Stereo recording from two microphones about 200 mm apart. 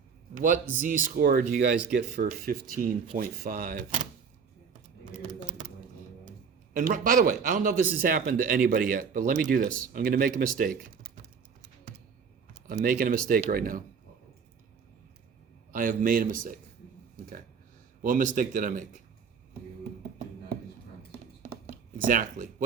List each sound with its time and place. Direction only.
0.3 s a man's voice: 40° right (ahead or behind)
6.7 s speech: 45° right (ahead or behind)
12.6 s speech: 45° right (ahead or behind)
15.7 s speech: 40° right (ahead or behind)
18.0 s speech: 40° right (ahead or behind)
21.1 s computer keyboard: 45° right (ahead or behind)